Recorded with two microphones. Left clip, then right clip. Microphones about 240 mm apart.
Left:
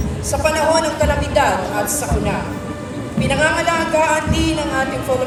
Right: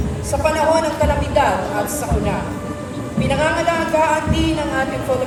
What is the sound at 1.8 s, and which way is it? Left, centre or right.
Speech, left.